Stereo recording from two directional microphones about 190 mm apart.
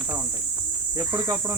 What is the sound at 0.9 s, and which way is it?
Speech, 20° right (ahead or behind).